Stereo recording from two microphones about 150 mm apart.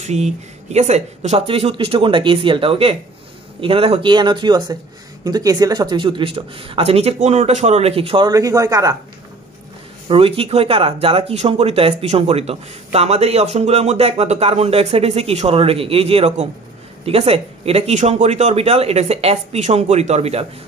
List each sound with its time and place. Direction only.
0.0 s speech: 50° right (ahead or behind)
8.3 s a man's voice: 25° right (ahead or behind)
10.0 s speech: 40° right (ahead or behind)